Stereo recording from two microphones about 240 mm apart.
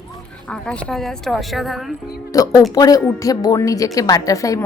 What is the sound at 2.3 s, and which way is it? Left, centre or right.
A woman's voice, centre.